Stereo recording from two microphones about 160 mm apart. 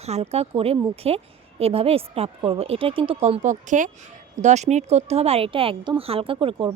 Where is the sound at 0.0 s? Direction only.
40° right (ahead or behind).